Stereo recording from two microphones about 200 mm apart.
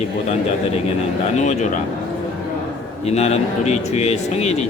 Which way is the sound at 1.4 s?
35° left (ahead or behind).